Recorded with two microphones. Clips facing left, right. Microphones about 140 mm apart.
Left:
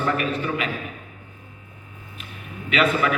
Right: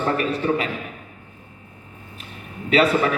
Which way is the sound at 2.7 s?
35° right (ahead or behind).